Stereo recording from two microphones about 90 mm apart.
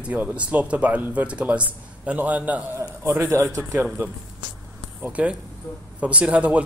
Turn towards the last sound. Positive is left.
turn(degrees=-15)  # may be behind; listen again after turning